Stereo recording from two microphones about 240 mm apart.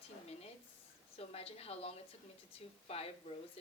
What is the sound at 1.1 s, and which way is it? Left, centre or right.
A woman's voice, left.